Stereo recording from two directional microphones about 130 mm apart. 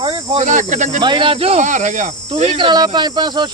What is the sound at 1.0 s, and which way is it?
Speech, 35° right (ahead or behind).